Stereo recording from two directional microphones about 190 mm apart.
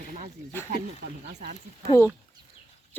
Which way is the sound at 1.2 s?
50° right (ahead or behind).